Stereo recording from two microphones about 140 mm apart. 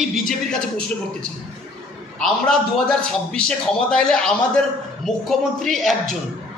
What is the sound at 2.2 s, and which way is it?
A man's voice, 5° left (ahead or behind).